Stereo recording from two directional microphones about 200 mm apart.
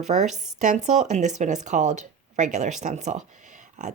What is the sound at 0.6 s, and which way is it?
Speech, 35° right (ahead or behind).